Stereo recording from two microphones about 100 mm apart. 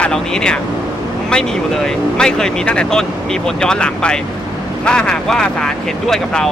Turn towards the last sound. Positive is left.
turn(degrees=5)  # may be behind; listen again after turning